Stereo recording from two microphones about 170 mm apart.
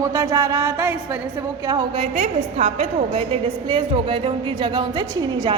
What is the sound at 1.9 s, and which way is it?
A woman's voice, 40° right (ahead or behind).